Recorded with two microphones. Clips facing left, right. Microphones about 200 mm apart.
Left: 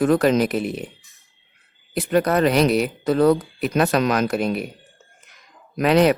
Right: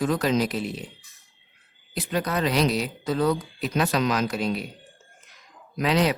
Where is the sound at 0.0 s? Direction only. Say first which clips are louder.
Left 6 dB; 60° left (ahead or behind).